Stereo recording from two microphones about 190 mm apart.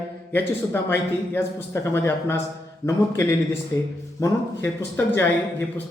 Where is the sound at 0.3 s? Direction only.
10° left (ahead or behind).